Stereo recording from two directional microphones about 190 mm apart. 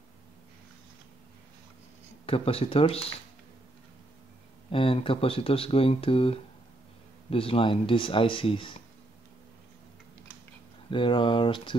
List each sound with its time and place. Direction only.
2.2 s speech: 30° left (ahead or behind)
4.6 s speech: 30° left (ahead or behind)
10.9 s speech: 25° left (ahead or behind)